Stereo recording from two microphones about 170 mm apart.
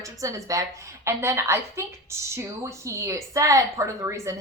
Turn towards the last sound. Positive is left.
turn(degrees=-15)  # may be behind; listen again after turning